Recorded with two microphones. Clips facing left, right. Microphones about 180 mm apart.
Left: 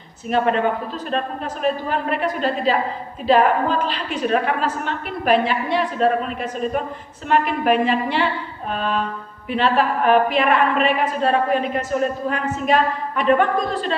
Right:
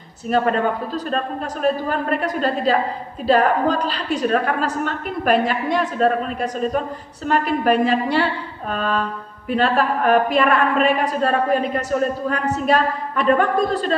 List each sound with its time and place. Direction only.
0.3 s a woman's voice: 40° right (ahead or behind)